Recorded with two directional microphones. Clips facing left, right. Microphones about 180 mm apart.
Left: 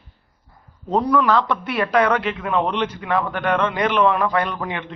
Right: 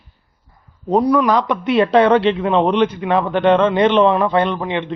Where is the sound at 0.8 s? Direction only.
15° right (ahead or behind).